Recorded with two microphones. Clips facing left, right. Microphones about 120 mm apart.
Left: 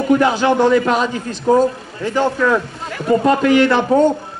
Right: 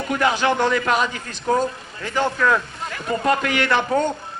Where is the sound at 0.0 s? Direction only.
20° left (ahead or behind).